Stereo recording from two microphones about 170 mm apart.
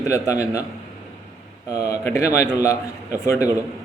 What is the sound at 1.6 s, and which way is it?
Speech, 20° left (ahead or behind).